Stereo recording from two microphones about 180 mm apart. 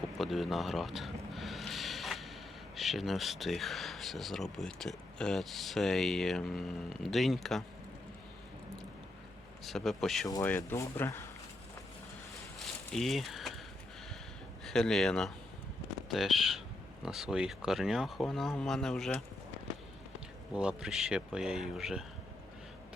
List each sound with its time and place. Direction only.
0.2 s music: centre (ahead or behind)
2.7 s speech: centre (ahead or behind)
9.6 s speech: centre (ahead or behind)
10.2 s speech: 20° left (ahead or behind)
12.9 s speech: centre (ahead or behind)
14.6 s speech: 5° left (ahead or behind)
20.5 s speech: 5° right (ahead or behind)